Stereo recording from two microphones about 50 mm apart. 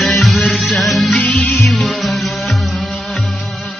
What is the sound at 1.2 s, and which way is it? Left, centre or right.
Music, left.